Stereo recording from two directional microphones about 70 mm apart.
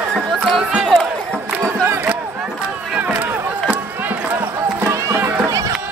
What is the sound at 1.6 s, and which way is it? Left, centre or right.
Music, right.